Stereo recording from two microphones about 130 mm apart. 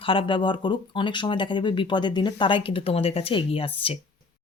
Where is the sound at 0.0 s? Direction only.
40° left (ahead or behind).